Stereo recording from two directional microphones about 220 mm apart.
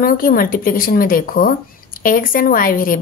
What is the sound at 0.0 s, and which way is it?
A woman's voice, 40° left (ahead or behind).